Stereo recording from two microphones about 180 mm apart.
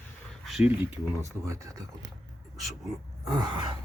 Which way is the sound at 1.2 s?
15° right (ahead or behind).